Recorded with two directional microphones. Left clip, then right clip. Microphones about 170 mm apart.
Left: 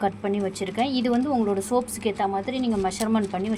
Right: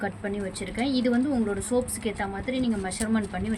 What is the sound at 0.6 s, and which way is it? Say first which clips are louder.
Speech: right 1 dB; 25° left (ahead or behind).